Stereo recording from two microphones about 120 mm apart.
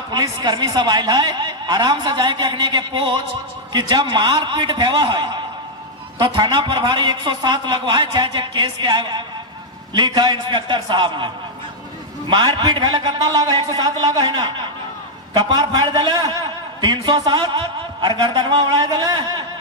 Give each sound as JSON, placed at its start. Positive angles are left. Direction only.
{"t": 0.1, "sound": "speech", "side_deg": -35}
{"t": 12.3, "sound": "speech", "side_deg": -40}